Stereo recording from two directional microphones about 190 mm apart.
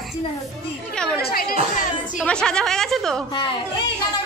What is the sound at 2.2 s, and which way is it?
Speech, 5° left (ahead or behind).